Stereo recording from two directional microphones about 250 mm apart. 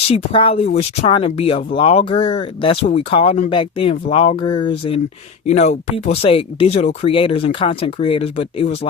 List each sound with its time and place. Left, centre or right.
0.1 s speech: left